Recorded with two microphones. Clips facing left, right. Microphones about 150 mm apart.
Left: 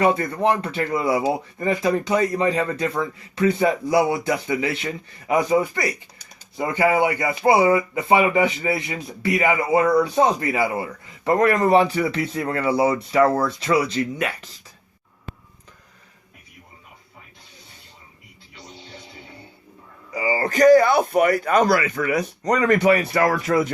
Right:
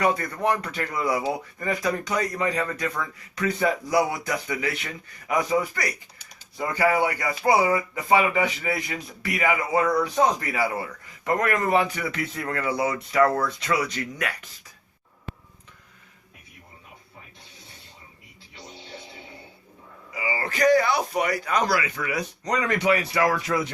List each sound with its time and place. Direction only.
0.0 s speech: 25° left (ahead or behind)
11.2 s speech: 35° left (ahead or behind)
20.1 s speech: 35° left (ahead or behind)